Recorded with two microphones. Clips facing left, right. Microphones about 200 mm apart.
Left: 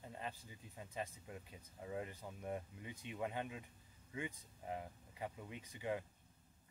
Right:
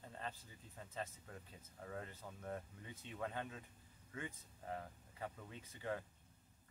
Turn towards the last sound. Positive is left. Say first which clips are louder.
# left 2 dB
turn(degrees=15)  # may be behind; listen again after turning